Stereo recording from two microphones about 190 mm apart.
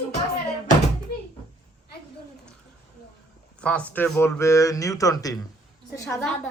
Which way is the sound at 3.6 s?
5° left (ahead or behind).